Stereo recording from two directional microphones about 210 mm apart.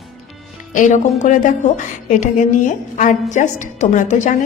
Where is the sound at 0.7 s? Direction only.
35° left (ahead or behind).